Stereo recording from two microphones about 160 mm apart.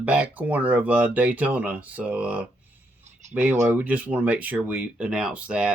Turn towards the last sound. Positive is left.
turn(degrees=-5)  # may be behind; listen again after turning